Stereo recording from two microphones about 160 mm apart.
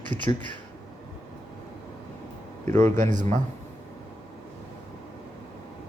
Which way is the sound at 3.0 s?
50° right (ahead or behind).